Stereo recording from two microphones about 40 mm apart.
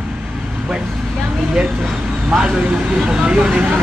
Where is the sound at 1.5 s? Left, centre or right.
Right.